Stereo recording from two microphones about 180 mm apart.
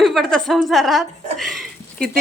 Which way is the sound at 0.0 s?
Centre (ahead or behind).